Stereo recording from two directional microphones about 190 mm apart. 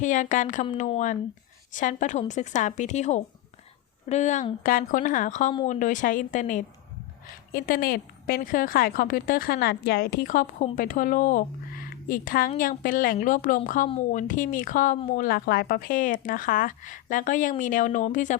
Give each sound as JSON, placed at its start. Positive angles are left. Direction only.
{"t": 0.0, "sound": "a woman's voice", "side_deg": 40}